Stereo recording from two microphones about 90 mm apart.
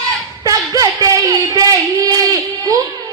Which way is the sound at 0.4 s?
40° right (ahead or behind).